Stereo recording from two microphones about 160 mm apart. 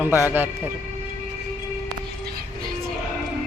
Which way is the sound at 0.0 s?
10° right (ahead or behind).